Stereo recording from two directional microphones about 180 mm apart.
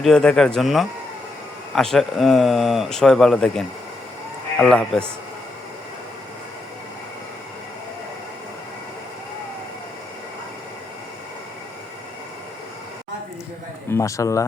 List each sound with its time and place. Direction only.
0.0 s speech: 5° left (ahead or behind)
13.9 s speech: 15° left (ahead or behind)